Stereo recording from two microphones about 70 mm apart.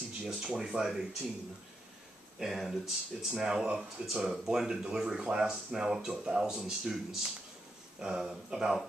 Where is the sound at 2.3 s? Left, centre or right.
Centre.